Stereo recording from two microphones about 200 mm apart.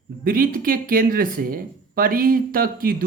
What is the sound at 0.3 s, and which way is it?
Speech, 45° right (ahead or behind).